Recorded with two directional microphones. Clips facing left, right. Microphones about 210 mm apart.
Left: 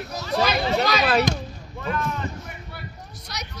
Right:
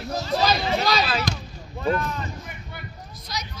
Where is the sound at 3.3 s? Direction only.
65° left (ahead or behind).